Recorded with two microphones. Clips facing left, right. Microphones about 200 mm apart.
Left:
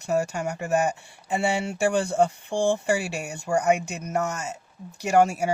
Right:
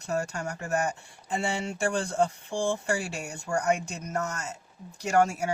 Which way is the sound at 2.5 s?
70° left (ahead or behind).